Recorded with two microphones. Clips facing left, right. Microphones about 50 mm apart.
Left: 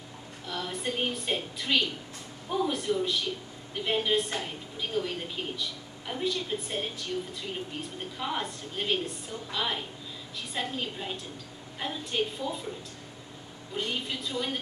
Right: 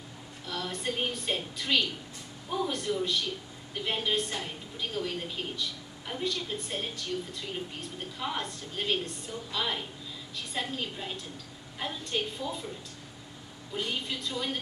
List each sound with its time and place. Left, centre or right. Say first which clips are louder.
0.5 s a woman's voice: left 1 dB; centre
8.2 s a woman's voice: left 2 dB; centre
13.7 s a woman's voice: left 1 dB; centre